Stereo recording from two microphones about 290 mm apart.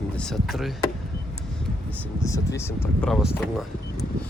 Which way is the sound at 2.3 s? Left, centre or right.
Centre.